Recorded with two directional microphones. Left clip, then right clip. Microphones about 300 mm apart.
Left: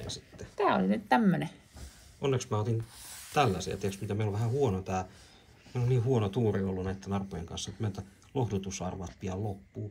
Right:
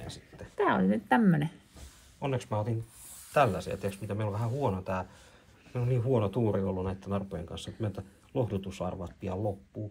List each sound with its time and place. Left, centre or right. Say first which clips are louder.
0.0 s a sound: left 3 dB; centre
0.6 s a woman's voice: even; right
2.2 s speech: left 1 dB; centre